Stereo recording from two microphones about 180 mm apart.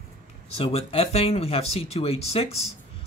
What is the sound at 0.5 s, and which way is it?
Speech, 35° left (ahead or behind).